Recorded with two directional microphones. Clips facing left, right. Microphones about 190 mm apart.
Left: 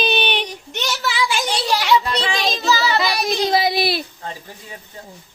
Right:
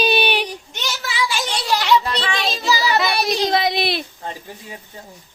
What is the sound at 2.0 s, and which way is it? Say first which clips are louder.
Child singing: left 1 dB; centre (ahead or behind).